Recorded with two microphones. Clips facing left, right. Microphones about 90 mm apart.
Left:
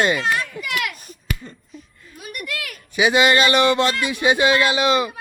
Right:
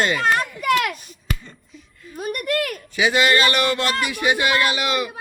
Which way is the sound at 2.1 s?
45° right (ahead or behind).